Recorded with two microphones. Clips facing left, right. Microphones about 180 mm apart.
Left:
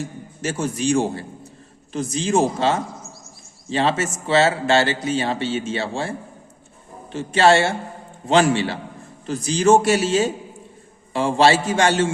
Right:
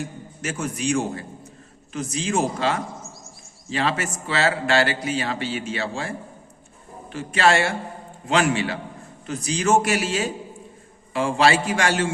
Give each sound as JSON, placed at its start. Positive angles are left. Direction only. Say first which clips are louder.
{"t": 0.0, "sound": "a man's voice", "louder": "left 3 dB", "side_deg": 30}